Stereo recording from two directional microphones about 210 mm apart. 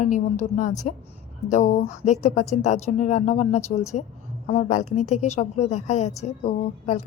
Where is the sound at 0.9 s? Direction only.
35° left (ahead or behind).